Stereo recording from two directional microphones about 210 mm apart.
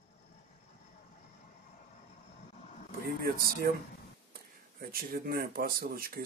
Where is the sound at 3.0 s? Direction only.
45° right (ahead or behind).